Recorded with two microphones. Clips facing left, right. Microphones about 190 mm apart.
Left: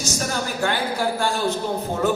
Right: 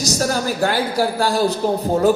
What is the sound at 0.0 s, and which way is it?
Speech, 35° right (ahead or behind).